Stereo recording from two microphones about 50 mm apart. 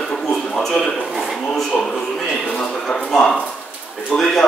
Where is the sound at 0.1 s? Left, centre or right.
Centre.